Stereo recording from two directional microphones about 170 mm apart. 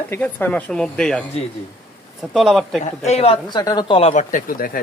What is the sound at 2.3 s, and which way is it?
Speech, centre (ahead or behind).